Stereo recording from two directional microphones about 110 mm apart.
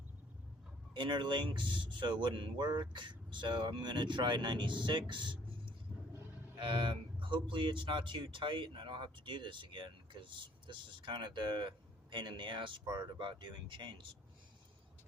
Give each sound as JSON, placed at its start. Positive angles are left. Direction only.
{"t": 0.9, "sound": "speech", "side_deg": -45}